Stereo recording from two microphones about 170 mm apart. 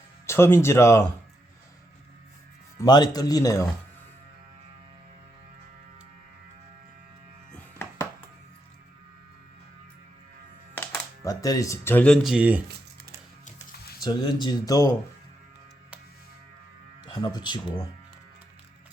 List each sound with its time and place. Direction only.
0.3 s speech: 15° left (ahead or behind)
2.8 s speech: 25° left (ahead or behind)
7.5 s music: 15° left (ahead or behind)
11.2 s speech: 20° left (ahead or behind); by 12.6 s 10° right (ahead or behind)
14.0 s speech: 25° left (ahead or behind)
17.1 s speech: 25° left (ahead or behind)